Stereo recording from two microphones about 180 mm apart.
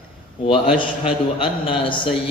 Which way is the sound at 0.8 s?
30° left (ahead or behind).